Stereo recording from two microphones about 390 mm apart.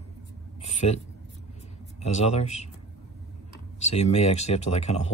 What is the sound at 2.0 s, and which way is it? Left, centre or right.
Speech, centre.